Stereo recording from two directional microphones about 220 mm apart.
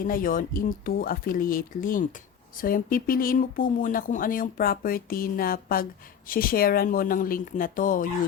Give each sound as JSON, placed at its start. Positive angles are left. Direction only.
{"t": 0.0, "sound": "speech", "side_deg": 40}